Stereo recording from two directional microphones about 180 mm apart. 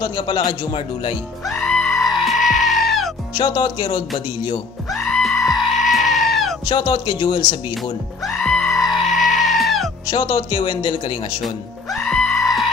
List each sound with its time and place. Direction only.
0.0 s speech: 25° left (ahead or behind)
1.5 s goat: 5° left (ahead or behind)
3.3 s speech: 25° left (ahead or behind)
4.9 s goat: centre (ahead or behind)
6.6 s speech: 25° left (ahead or behind)
8.3 s goat: 5° left (ahead or behind)
10.0 s speech: 25° left (ahead or behind)
11.4 s music: centre (ahead or behind)